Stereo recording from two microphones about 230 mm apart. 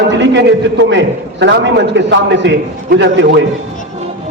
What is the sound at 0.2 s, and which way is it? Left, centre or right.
Speech, right.